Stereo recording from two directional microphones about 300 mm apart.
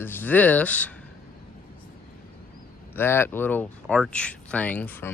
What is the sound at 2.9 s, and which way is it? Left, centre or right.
Speech, centre.